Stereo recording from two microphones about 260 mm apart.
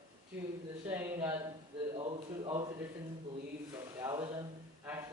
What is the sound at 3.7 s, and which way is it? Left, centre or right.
Speech, centre.